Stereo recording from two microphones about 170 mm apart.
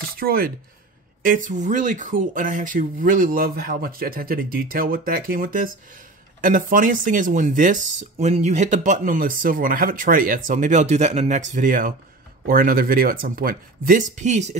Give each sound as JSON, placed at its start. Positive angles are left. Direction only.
{"t": 0.2, "sound": "speech", "side_deg": -60}